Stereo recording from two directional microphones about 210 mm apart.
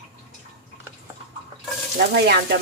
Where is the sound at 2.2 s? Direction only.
50° right (ahead or behind).